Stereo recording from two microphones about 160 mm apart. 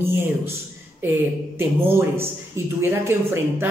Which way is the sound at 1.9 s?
15° right (ahead or behind).